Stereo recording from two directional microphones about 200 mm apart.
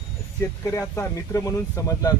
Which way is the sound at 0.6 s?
15° left (ahead or behind).